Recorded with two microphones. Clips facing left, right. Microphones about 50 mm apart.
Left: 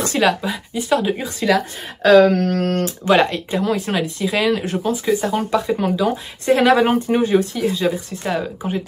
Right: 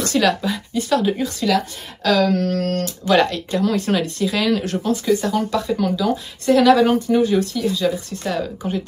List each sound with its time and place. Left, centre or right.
0.0 s speech: left
2.0 s speech: left
8.2 s speech: centre